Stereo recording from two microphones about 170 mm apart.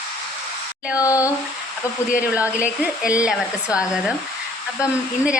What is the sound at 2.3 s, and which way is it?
Speech, 10° right (ahead or behind).